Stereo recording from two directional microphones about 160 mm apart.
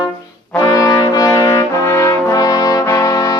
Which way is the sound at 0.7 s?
20° left (ahead or behind).